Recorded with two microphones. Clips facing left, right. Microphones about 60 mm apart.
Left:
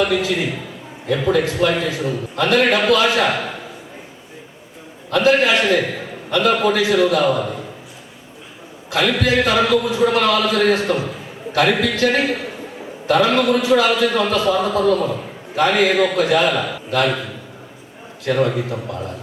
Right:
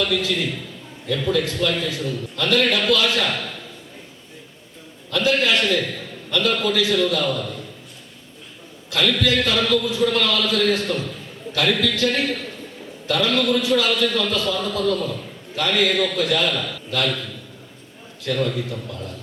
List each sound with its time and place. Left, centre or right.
0.0 s a man's voice: left
5.1 s a man's voice: left
8.9 s a man's voice: left